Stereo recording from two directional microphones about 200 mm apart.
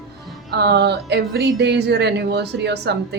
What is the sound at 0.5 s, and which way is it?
Speech, 55° right (ahead or behind).